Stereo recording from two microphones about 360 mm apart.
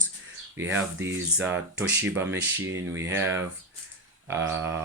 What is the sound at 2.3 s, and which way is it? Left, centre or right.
Speech, right.